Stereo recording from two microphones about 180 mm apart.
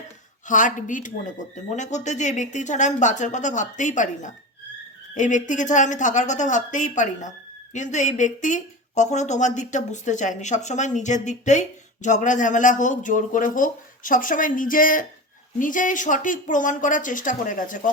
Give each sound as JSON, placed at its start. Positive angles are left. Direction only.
{"t": 0.4, "sound": "speech", "side_deg": 45}